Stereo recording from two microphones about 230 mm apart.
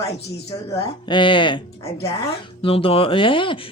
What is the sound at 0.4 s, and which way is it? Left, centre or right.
Speech, centre.